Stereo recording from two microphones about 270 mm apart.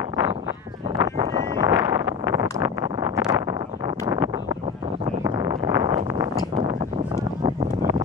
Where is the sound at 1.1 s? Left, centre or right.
Centre.